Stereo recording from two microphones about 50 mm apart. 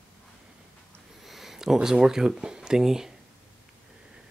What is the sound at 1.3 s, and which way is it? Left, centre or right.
Speech, centre.